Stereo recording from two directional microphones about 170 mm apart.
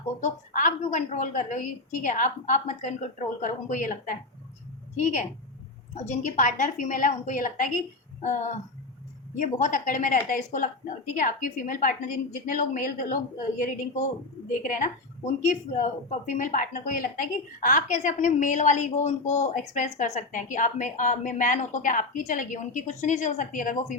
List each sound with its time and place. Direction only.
0.2 s a woman's voice: 45° left (ahead or behind)
5.9 s a woman's voice: 45° left (ahead or behind)